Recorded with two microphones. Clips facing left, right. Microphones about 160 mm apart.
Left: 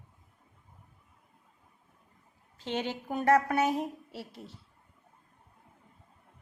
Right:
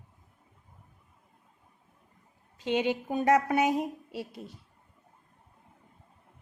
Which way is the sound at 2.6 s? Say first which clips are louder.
Right 6 dB; 15° right (ahead or behind).